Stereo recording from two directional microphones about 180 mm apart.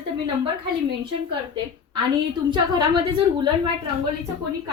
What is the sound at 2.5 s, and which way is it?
Speech, 25° right (ahead or behind).